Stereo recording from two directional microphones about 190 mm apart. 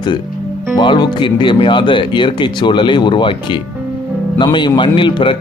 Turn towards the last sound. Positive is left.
turn(degrees=25)  # may be behind; listen again after turning